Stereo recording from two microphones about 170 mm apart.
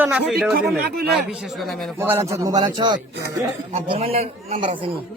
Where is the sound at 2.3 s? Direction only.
20° right (ahead or behind).